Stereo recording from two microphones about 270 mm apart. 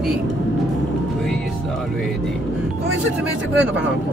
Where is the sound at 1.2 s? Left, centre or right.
Centre.